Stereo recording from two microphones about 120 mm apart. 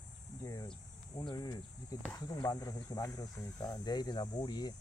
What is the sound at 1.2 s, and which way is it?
Speech, 35° left (ahead or behind).